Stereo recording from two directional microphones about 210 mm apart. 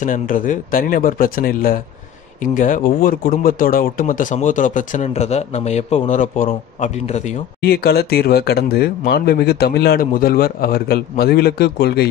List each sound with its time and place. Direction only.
0.0 s speech: 40° left (ahead or behind)
7.6 s speech: 50° left (ahead or behind)